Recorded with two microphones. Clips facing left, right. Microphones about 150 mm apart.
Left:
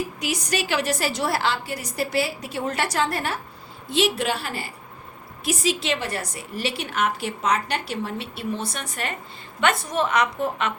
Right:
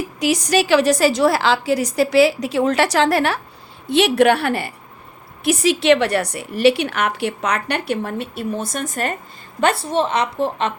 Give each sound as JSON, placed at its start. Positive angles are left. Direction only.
{"t": 0.2, "sound": "a woman's voice", "side_deg": -90}
{"t": 3.8, "sound": "a woman's voice", "side_deg": -65}
{"t": 9.6, "sound": "a woman's voice", "side_deg": -35}